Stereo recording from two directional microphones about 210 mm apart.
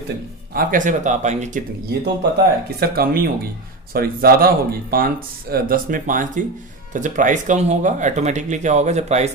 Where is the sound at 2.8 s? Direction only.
45° right (ahead or behind).